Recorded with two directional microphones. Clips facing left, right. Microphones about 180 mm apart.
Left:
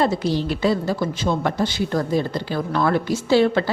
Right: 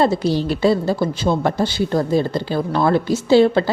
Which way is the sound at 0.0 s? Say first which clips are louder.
Right 3 dB; 30° right (ahead or behind).